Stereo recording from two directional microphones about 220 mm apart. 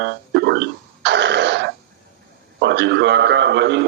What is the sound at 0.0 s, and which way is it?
Throat clearing, 50° right (ahead or behind).